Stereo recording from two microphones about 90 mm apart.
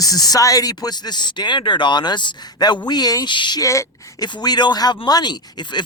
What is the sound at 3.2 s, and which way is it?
Speech, 60° left (ahead or behind).